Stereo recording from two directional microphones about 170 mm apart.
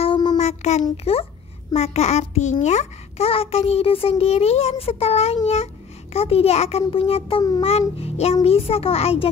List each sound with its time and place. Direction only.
0.0 s child singing: 30° left (ahead or behind)
0.4 s child singing: 40° left (ahead or behind)
1.1 s a child's voice: 35° left (ahead or behind)